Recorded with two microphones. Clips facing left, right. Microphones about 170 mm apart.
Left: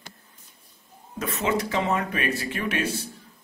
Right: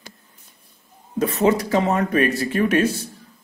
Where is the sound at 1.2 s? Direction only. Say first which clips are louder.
Right 7 dB; 35° right (ahead or behind).